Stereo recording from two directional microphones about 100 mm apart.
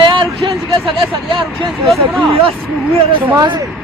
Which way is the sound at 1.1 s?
65° right (ahead or behind).